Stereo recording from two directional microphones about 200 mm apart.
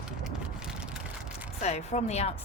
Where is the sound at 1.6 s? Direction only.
35° left (ahead or behind).